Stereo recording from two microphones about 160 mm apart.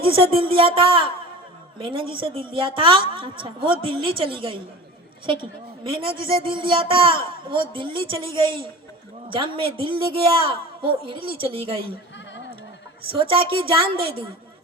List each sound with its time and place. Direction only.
0.0 s a woman's voice: 35° right (ahead or behind)
13.1 s a woman's voice: 35° right (ahead or behind)